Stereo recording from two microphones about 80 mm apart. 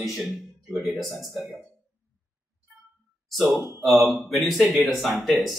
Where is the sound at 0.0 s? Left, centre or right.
Centre.